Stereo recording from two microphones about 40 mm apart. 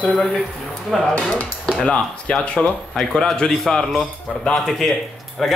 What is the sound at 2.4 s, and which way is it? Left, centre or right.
Speech, left.